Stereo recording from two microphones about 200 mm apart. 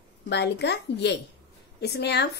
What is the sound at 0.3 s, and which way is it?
A woman's voice, 60° left (ahead or behind).